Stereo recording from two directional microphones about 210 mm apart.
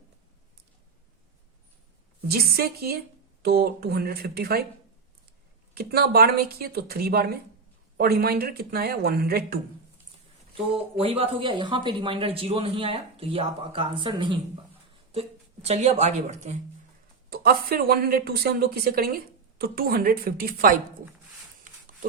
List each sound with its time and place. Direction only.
2.2 s speech: 50° right (ahead or behind)
5.7 s speech: 50° right (ahead or behind)
10.9 s a woman's voice: 25° right (ahead or behind)
17.2 s speech: 45° right (ahead or behind)